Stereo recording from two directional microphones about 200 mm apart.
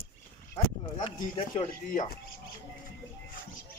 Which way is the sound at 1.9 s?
40° left (ahead or behind).